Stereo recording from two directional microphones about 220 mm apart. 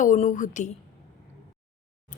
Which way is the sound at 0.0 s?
35° left (ahead or behind).